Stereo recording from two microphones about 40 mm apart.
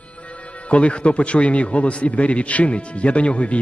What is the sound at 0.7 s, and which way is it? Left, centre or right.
A man's voice, left.